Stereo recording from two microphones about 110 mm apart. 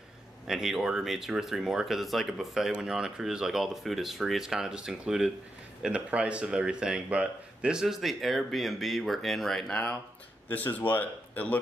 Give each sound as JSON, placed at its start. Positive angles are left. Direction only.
{"t": 0.5, "sound": "speech", "side_deg": -5}